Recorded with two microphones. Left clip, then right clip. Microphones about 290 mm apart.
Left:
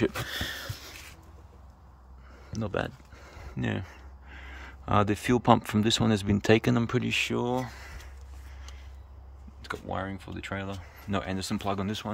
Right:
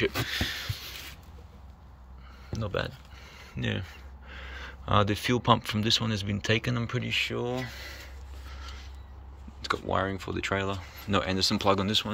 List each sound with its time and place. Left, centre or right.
0.0 s a sound: left
2.5 s speech: centre
9.6 s speech: centre